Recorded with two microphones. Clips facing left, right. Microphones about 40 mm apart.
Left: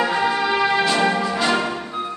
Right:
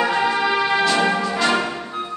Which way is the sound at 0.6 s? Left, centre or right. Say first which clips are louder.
Even; centre.